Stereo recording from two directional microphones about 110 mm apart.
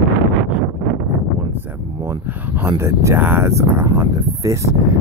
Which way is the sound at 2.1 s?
25° right (ahead or behind).